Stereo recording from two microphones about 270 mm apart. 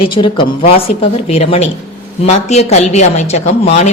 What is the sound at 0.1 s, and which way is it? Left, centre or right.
A woman's voice, centre.